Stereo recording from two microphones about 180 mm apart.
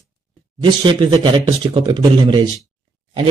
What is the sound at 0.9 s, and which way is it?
A man's voice, 25° right (ahead or behind).